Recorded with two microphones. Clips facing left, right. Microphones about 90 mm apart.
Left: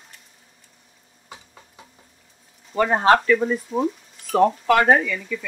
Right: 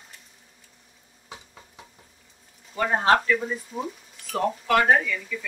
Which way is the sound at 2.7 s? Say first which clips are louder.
Left 4 dB; 90° left.